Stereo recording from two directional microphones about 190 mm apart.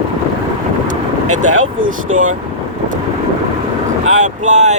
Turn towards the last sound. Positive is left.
turn(degrees=-40)  # may be behind; listen again after turning